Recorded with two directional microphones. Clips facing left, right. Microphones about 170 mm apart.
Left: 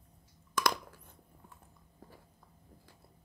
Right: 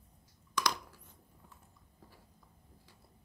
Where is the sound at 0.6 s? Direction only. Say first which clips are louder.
Left 3 dB; 50° left (ahead or behind).